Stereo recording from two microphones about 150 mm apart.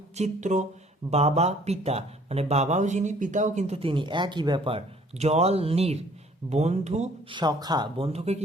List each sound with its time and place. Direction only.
0.2 s speech: 55° right (ahead or behind)
7.3 s speech: 30° right (ahead or behind)